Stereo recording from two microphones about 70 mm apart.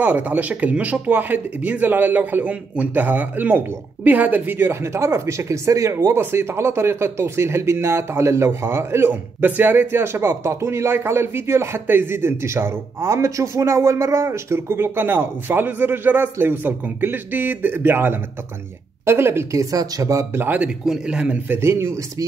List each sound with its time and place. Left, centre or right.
0.0 s speech: right
20.8 s a man's voice: centre
21.5 s speech: right